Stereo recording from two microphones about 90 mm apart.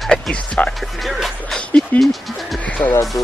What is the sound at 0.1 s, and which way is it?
Speech, 10° left (ahead or behind).